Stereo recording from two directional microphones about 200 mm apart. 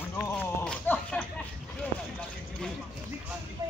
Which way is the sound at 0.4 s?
10° left (ahead or behind).